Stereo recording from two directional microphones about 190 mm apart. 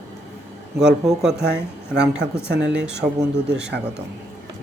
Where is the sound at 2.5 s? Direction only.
65° right (ahead or behind).